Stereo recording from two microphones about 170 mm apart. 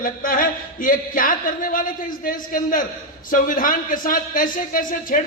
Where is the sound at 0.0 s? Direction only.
55° left (ahead or behind).